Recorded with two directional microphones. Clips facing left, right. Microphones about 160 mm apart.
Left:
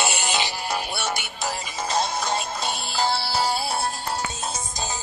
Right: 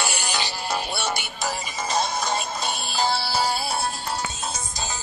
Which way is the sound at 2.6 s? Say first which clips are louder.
Even; 25° left (ahead or behind).